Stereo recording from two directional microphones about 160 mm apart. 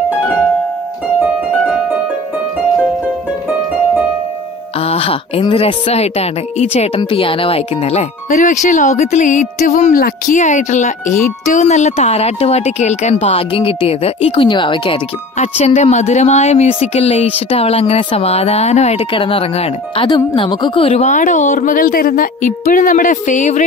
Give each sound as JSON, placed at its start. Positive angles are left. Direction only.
{"t": 4.7, "sound": "speech", "side_deg": 40}
{"t": 7.0, "sound": "speech", "side_deg": 30}
{"t": 15.3, "sound": "speech", "side_deg": 45}
{"t": 20.1, "sound": "speech", "side_deg": 30}